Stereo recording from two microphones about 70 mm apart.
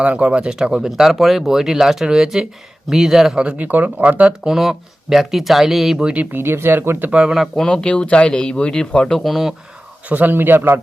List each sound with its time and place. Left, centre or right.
0.0 s speech: centre
3.3 s speech: centre
4.5 s speech: centre
6.3 s speech: right
7.1 s speech: centre
7.3 s speech: centre
7.6 s speech: centre
10.1 s a man's voice: right